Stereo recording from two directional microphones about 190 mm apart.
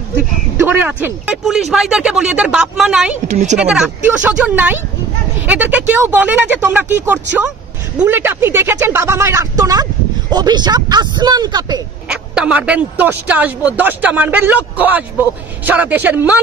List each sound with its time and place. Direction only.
0.6 s speech: 10° right (ahead or behind)
3.3 s speech: 35° right (ahead or behind)
3.5 s speech: 5° right (ahead or behind); by 11.8 s 20° right (ahead or behind)
12.1 s speech: 5° right (ahead or behind)